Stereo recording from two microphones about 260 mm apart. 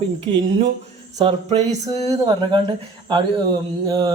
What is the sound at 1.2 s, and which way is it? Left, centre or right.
A man's voice, right.